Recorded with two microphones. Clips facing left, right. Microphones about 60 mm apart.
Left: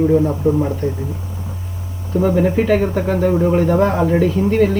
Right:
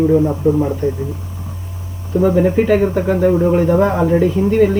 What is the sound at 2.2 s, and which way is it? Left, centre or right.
Speech, centre.